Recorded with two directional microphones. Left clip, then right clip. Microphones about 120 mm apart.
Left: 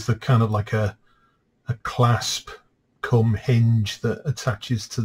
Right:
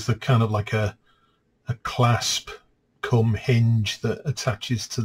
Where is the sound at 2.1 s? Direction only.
15° right (ahead or behind).